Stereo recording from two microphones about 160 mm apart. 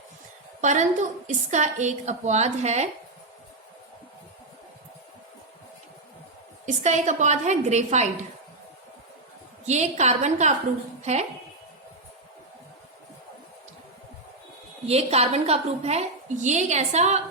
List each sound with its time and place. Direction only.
0.6 s a woman's voice: 50° right (ahead or behind)
6.7 s a woman's voice: 50° right (ahead or behind)
9.6 s a woman's voice: 45° right (ahead or behind)
14.8 s a woman's voice: 40° right (ahead or behind)